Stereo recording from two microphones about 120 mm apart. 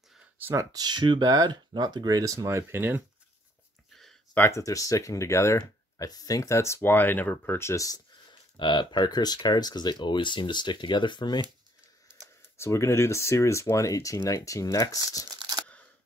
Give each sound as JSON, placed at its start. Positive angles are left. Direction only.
{"t": 0.4, "sound": "speech", "side_deg": -20}
{"t": 0.7, "sound": "speech", "side_deg": -35}
{"t": 3.9, "sound": "a sound", "side_deg": 5}
{"t": 4.4, "sound": "speech", "side_deg": 25}
{"t": 12.4, "sound": "speech", "side_deg": 25}
{"t": 15.3, "sound": "a sound", "side_deg": -35}